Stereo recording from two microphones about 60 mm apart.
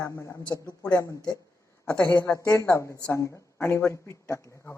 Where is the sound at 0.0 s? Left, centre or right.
Left.